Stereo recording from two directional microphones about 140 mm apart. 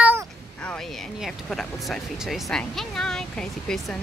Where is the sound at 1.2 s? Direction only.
Centre (ahead or behind).